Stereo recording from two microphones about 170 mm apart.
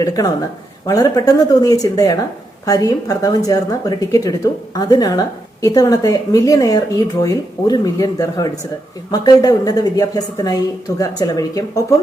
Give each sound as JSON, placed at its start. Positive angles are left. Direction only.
{"t": 0.0, "sound": "speech", "side_deg": 20}